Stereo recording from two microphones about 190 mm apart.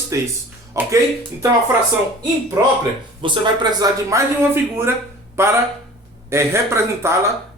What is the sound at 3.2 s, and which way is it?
Speech, 25° right (ahead or behind).